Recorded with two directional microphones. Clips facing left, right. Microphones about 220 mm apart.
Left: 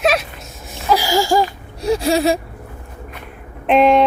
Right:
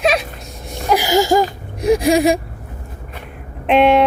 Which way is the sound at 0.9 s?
20° right (ahead or behind).